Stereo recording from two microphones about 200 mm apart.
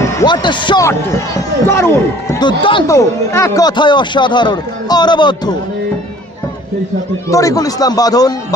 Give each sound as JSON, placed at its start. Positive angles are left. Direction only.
{"t": 0.0, "sound": "speech", "side_deg": 20}
{"t": 7.3, "sound": "speech", "side_deg": 15}